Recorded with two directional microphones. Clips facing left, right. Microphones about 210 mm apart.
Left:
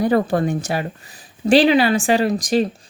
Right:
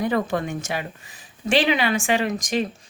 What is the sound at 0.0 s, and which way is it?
A woman's voice, 35° left (ahead or behind).